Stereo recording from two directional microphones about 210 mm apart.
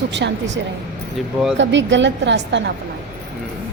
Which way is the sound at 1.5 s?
60° right (ahead or behind).